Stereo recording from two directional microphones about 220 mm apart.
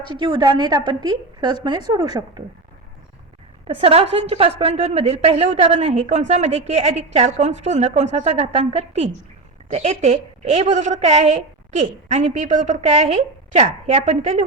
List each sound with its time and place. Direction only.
0.1 s a woman's voice: 20° right (ahead or behind)
3.7 s a woman's voice: 25° right (ahead or behind)